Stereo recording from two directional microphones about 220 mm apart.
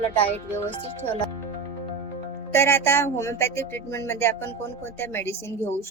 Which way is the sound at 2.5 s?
10° left (ahead or behind).